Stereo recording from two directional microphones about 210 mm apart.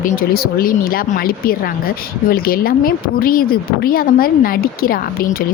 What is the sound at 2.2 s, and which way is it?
Speech, 45° left (ahead or behind).